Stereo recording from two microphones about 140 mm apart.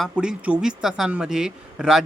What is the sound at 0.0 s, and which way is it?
Speech, 5° right (ahead or behind).